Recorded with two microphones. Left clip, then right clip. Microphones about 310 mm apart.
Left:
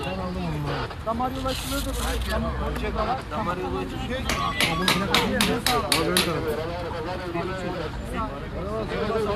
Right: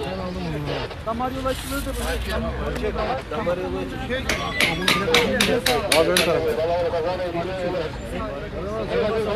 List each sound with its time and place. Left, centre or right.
4.1 s speech: left